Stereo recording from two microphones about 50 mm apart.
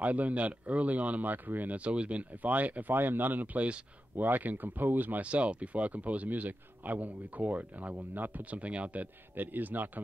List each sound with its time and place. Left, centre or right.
0.0 s speech: right
1.8 s speech: right
5.2 s speech: right
9.3 s speech: right